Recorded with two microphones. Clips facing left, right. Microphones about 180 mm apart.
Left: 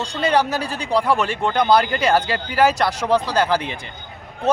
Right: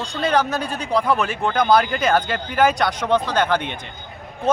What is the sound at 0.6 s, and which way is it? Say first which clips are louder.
Speech: left 1 dB; 30° left (ahead or behind).